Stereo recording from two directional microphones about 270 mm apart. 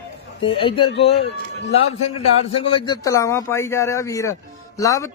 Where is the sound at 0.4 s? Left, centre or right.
Centre.